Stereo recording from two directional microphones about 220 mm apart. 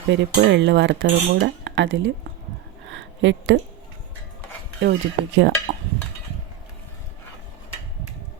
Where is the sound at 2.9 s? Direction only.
55° right (ahead or behind).